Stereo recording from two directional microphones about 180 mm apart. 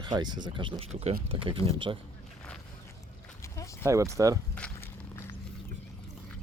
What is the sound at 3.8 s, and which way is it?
Speech, 15° right (ahead or behind).